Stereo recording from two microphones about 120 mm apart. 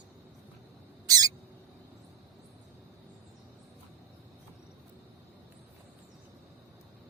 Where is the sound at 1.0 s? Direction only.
30° right (ahead or behind).